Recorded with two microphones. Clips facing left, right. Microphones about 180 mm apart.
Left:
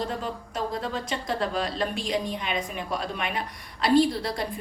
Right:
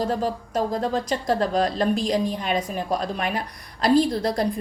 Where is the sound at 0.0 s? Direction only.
40° right (ahead or behind).